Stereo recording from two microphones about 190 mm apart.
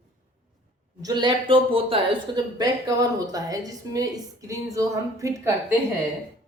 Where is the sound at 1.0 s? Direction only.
20° right (ahead or behind).